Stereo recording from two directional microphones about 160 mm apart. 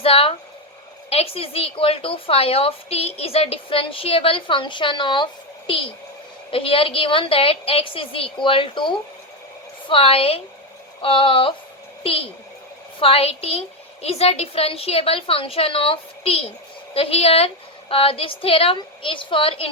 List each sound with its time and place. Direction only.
0.0 s a woman's voice: 35° left (ahead or behind)